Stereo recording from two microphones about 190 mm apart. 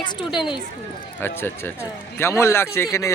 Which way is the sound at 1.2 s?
10° left (ahead or behind).